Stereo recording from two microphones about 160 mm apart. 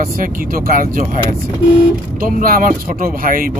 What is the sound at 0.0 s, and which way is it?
Speech, 60° right (ahead or behind).